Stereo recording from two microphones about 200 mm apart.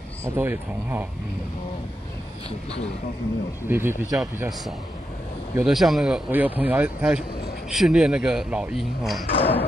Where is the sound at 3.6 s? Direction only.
10° right (ahead or behind).